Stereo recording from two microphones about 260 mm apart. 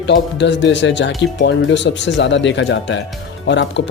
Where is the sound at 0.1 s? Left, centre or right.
Left.